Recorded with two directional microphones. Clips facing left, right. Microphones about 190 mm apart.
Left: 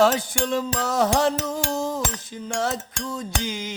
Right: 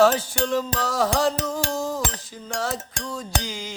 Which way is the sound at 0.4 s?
20° left (ahead or behind).